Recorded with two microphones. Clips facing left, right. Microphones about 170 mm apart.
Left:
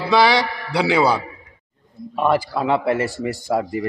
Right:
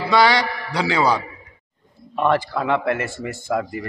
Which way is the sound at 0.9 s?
10° left (ahead or behind).